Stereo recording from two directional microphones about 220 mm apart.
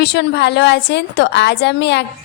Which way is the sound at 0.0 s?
50° left (ahead or behind).